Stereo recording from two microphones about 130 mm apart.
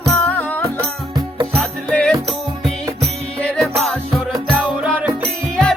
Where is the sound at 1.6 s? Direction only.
5° left (ahead or behind).